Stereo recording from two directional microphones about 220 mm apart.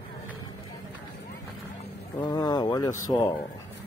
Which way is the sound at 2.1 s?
20° left (ahead or behind).